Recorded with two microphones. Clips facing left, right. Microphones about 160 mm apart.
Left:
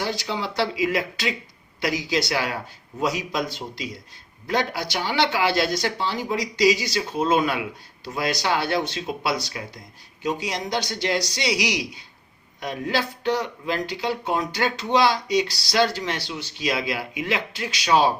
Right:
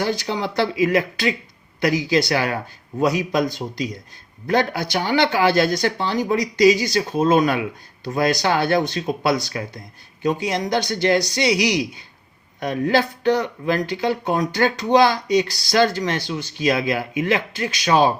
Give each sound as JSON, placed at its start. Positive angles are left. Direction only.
{"t": 0.0, "sound": "speech", "side_deg": -50}